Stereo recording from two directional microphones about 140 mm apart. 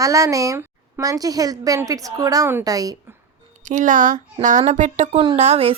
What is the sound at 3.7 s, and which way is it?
A woman's voice, 65° right (ahead or behind).